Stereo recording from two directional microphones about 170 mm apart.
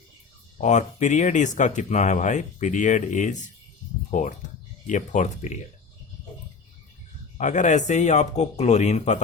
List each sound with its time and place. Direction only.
0.6 s speech: 45° left (ahead or behind)
7.3 s speech: 45° left (ahead or behind)